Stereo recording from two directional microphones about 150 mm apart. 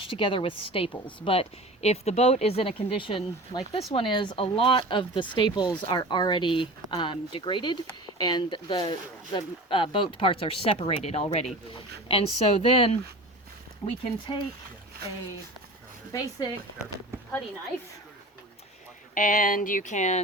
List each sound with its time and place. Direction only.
0.0 s speech: 35° left (ahead or behind)
12.6 s speech: 40° left (ahead or behind)
16.1 s speech: 25° left (ahead or behind)
19.1 s speech: 60° left (ahead or behind)